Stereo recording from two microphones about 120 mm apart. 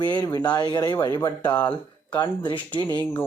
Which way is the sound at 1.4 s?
15° left (ahead or behind).